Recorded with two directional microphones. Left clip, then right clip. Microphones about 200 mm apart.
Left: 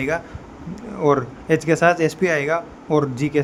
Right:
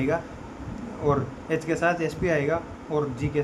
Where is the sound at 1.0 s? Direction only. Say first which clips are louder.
Left 7 dB; 55° left (ahead or behind).